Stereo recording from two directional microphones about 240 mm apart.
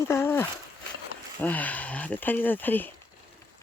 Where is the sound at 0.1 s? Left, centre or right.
Centre.